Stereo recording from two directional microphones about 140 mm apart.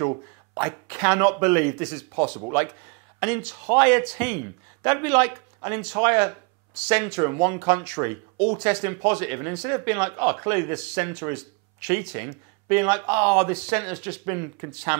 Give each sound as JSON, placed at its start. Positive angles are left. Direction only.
{"t": 0.0, "sound": "speech", "side_deg": -20}